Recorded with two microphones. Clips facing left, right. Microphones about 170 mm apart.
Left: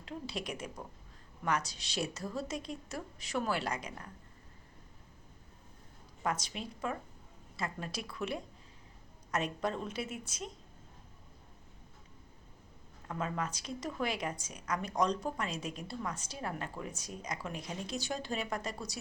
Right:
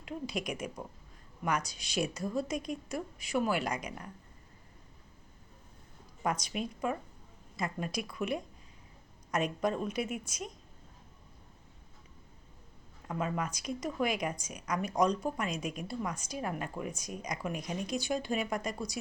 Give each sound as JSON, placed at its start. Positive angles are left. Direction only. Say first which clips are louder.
{"t": 0.0, "sound": "a woman's voice", "louder": "right 3 dB", "side_deg": -15}
{"t": 6.4, "sound": "a woman's voice", "louder": "right 5 dB", "side_deg": -15}
{"t": 13.1, "sound": "a woman's voice", "louder": "right 2 dB", "side_deg": -15}